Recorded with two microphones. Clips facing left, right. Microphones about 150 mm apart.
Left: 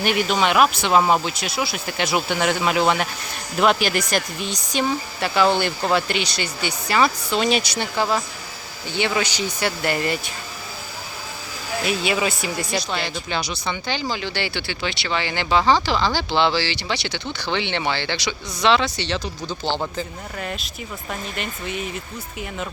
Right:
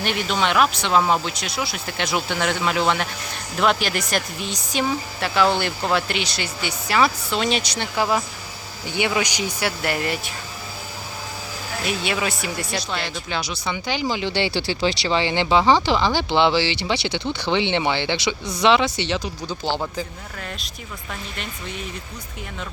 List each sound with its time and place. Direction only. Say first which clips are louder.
0.0 s speech: left 3 dB; 10° left (ahead or behind)
7.9 s speech: right 1 dB; 5° right (ahead or behind)
11.9 s speech: left 2 dB; centre (ahead or behind)
20.4 s speech: left 5 dB; 5° left (ahead or behind)